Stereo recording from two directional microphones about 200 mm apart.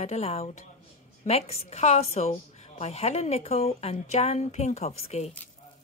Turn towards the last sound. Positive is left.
turn(degrees=35)  # may be behind; listen again after turning